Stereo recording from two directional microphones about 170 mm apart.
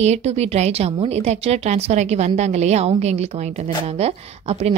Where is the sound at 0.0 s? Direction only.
40° right (ahead or behind).